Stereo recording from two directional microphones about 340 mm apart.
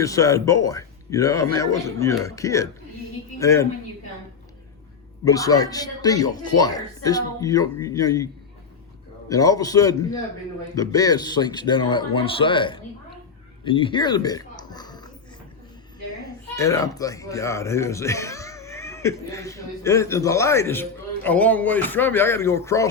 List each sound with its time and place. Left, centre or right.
0.0 s speech: centre
5.2 s speech: centre
9.3 s speech: centre
13.7 s a sound: centre
16.6 s speech: centre